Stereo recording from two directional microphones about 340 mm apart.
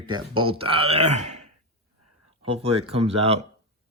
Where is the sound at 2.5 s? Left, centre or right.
Centre.